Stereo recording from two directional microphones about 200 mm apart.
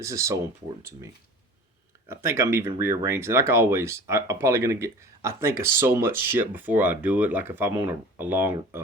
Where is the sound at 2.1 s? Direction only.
15° right (ahead or behind).